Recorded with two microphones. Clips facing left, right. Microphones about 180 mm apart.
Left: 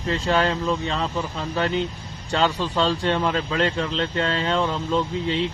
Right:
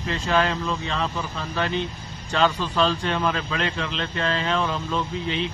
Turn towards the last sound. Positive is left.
turn(degrees=25)  # may be behind; listen again after turning